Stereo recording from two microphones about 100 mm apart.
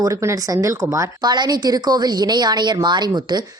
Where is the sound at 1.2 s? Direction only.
40° right (ahead or behind).